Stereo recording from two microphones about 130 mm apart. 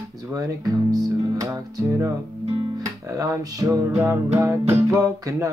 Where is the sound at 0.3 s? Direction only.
25° right (ahead or behind).